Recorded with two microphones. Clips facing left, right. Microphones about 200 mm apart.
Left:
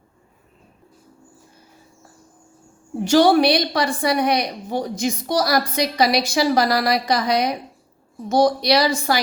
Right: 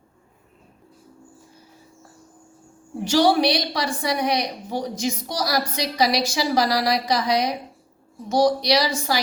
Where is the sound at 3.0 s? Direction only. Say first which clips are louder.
Left 4 dB; 55° left (ahead or behind).